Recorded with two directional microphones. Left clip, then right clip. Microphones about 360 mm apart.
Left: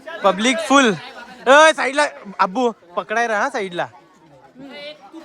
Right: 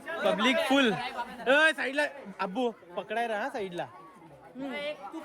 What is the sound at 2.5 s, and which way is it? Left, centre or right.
Speech, left.